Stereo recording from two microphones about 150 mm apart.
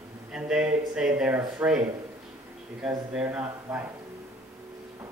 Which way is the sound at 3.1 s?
10° right (ahead or behind).